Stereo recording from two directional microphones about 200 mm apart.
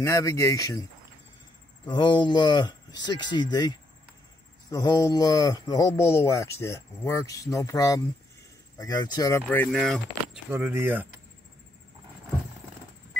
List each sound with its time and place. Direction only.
0.0 s speech: 15° left (ahead or behind)
1.9 s speech: 25° left (ahead or behind); by 10.4 s centre (ahead or behind)
10.5 s speech: 10° right (ahead or behind)